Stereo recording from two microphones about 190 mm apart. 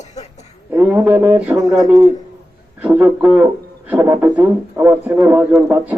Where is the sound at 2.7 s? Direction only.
5° right (ahead or behind).